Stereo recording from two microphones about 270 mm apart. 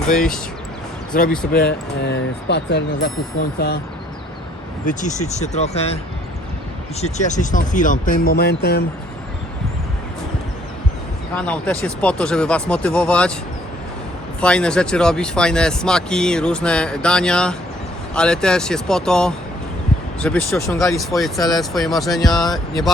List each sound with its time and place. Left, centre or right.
1.1 s speech: left
4.9 s speech: left
7.0 s speech: left
11.3 s speech: centre
14.4 s speech: centre